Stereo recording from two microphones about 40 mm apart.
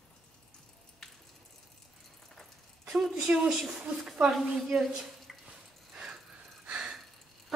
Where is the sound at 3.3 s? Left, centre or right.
Right.